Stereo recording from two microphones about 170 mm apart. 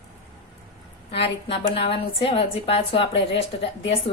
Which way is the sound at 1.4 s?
35° left (ahead or behind).